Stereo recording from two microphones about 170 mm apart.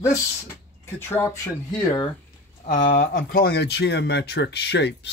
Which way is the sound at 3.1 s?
65° left (ahead or behind).